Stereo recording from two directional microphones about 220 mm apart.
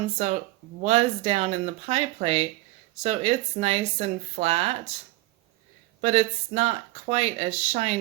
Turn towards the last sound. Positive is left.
turn(degrees=-30)  # may be behind; listen again after turning